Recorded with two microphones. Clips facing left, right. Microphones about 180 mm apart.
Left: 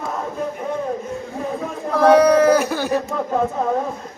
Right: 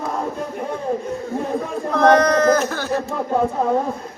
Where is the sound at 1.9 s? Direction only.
10° left (ahead or behind).